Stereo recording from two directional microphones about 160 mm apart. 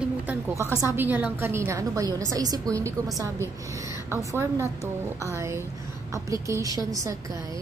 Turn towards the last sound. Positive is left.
turn(degrees=-20)  # may be behind; listen again after turning